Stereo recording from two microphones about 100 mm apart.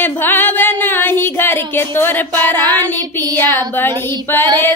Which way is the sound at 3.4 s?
40° right (ahead or behind).